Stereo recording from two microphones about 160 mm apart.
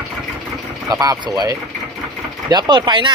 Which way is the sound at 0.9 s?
25° right (ahead or behind).